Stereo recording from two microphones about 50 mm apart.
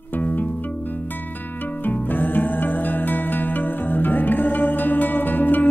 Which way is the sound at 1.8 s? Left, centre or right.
Left.